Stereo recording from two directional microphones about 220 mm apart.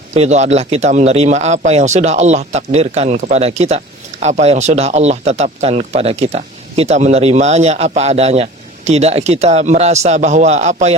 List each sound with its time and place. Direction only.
0.1 s a man's voice: 30° right (ahead or behind)